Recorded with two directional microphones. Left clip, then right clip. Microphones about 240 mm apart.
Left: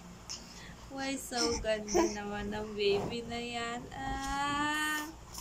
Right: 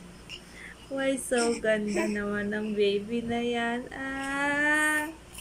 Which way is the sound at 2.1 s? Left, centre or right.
Right.